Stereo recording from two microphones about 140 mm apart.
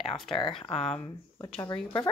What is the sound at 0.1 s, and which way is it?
Speech, 35° left (ahead or behind).